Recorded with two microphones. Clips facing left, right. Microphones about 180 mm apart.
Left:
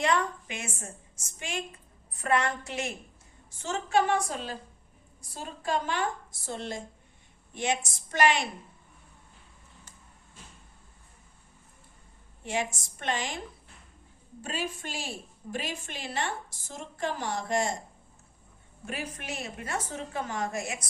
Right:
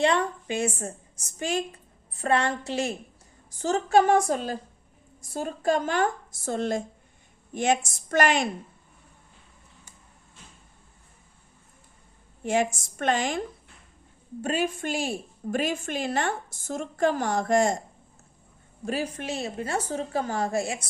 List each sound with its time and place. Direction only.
0.0 s a woman's voice: 30° right (ahead or behind); by 8.4 s 45° right (ahead or behind)
12.5 s a woman's voice: 50° right (ahead or behind)
14.4 s a woman's voice: 55° right (ahead or behind)
18.9 s a woman's voice: 30° right (ahead or behind)